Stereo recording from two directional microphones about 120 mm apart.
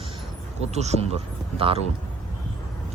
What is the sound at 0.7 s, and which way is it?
Speech, 65° right (ahead or behind).